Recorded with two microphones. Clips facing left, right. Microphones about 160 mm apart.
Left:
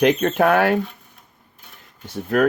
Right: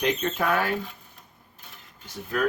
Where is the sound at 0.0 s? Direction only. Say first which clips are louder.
Left 9 dB; 65° left (ahead or behind).